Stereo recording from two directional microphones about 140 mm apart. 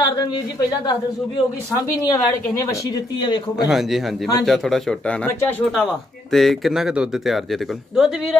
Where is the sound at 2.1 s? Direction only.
25° left (ahead or behind).